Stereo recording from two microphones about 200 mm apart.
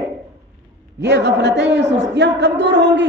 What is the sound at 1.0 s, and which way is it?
A man's voice, 60° right (ahead or behind).